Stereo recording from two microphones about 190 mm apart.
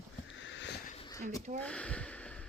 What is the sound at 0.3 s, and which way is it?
Sniff, 75° left (ahead or behind).